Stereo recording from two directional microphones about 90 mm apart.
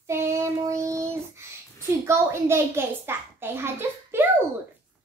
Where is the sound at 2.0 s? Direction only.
30° right (ahead or behind).